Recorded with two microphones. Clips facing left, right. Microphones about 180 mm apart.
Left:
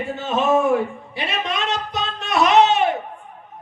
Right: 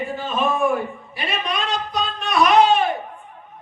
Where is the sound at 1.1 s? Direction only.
25° left (ahead or behind).